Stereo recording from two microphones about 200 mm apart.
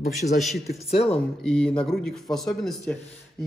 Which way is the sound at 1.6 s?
5° left (ahead or behind).